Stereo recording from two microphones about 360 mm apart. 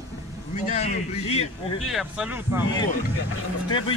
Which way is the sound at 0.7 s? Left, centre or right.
Centre.